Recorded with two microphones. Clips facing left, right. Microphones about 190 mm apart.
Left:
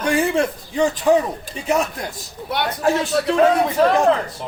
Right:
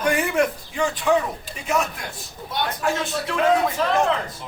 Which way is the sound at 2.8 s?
35° left (ahead or behind).